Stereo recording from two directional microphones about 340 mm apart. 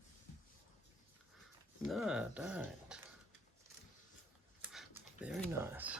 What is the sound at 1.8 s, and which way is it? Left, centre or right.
Speech, centre.